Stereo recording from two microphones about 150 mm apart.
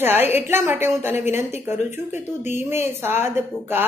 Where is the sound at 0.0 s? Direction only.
15° right (ahead or behind).